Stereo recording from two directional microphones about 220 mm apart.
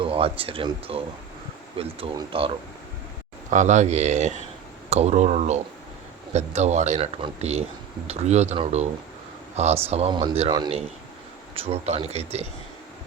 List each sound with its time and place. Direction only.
0.0 s speech: 25° right (ahead or behind)